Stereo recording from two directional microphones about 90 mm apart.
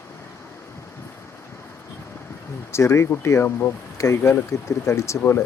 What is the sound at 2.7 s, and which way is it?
Speech, 30° left (ahead or behind).